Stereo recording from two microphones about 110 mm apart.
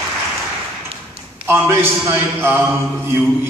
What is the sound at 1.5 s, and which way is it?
A man's voice, 20° right (ahead or behind).